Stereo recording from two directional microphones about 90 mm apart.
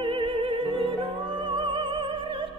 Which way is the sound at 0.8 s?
70° right (ahead or behind).